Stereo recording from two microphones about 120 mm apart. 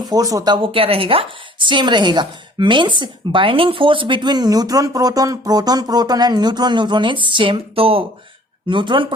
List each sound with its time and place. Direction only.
0.0 s a woman's voice: 30° right (ahead or behind)